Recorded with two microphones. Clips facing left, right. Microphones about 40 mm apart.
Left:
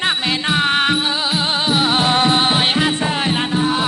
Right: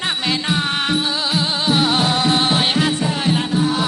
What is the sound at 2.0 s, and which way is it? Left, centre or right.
Music, left.